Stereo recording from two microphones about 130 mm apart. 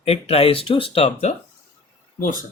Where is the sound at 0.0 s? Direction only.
50° left (ahead or behind).